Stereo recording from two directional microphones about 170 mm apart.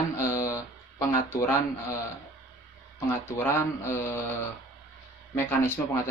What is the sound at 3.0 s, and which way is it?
Speech, 15° left (ahead or behind).